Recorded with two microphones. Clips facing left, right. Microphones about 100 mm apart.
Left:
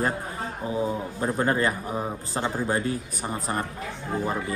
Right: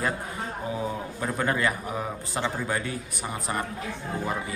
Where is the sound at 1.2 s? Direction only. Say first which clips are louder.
Left 2 dB; 35° left (ahead or behind).